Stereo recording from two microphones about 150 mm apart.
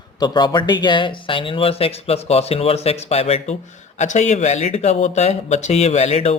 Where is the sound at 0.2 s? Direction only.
30° left (ahead or behind).